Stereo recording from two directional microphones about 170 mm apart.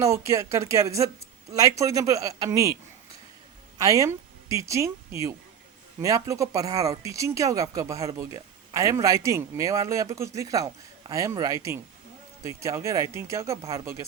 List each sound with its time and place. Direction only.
0.0 s speech: 15° right (ahead or behind)
3.8 s speech: 20° right (ahead or behind)